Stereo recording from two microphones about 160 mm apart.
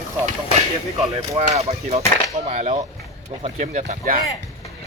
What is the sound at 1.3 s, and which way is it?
Speech, 40° right (ahead or behind).